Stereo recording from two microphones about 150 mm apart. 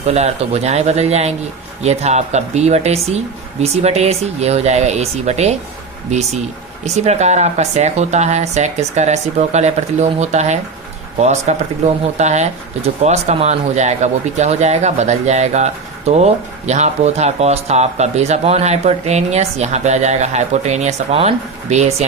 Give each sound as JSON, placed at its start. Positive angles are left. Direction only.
{"t": 0.0, "sound": "speech", "side_deg": -45}